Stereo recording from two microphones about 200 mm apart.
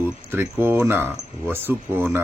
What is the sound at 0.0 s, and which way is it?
Speech, 10° right (ahead or behind).